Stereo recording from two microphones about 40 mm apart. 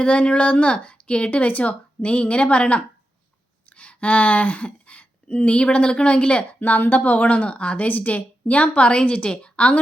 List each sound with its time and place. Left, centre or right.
0.0 s speech: left
6.6 s speech: left
7.9 s a woman's voice: left